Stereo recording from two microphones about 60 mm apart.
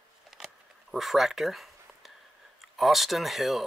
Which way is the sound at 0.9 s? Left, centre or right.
Centre.